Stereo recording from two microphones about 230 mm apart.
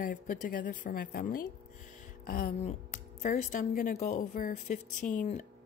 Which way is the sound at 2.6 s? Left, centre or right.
Left.